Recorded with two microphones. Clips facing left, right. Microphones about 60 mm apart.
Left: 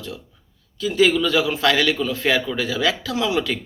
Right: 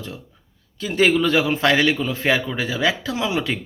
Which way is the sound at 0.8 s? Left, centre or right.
Right.